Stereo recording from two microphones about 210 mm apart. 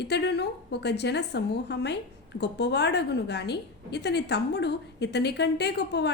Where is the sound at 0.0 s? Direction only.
55° left (ahead or behind).